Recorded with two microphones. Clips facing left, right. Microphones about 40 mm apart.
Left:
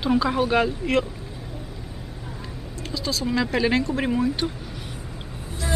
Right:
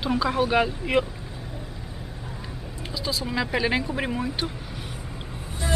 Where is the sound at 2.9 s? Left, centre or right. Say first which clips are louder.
Left 3 dB; centre.